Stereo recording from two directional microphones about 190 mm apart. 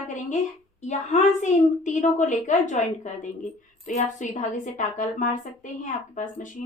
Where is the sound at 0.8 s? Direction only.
40° left (ahead or behind).